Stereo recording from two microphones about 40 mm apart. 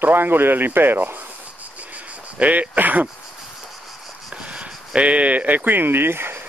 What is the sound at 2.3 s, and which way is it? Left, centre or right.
Speech, right.